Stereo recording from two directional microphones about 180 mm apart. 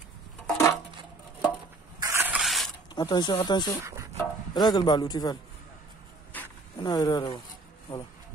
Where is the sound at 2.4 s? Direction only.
Centre (ahead or behind).